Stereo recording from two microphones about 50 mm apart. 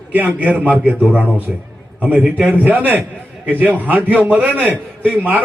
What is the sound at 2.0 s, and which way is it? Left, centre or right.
Speech, right.